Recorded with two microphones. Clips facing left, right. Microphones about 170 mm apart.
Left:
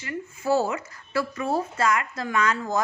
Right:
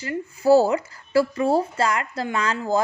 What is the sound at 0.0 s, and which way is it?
Speech, 35° right (ahead or behind).